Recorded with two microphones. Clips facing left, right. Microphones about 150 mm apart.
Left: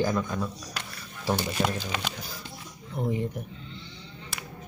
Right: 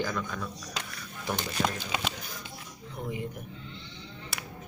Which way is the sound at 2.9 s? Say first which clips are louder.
Left 7 dB; 35° left (ahead or behind).